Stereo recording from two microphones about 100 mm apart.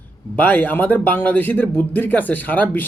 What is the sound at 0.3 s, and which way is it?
A man's voice, 15° left (ahead or behind).